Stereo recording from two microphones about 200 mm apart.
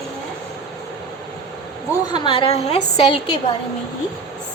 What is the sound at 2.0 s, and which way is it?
A woman's voice, 25° left (ahead or behind).